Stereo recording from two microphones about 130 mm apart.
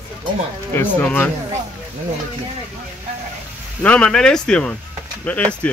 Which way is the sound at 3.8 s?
10° left (ahead or behind).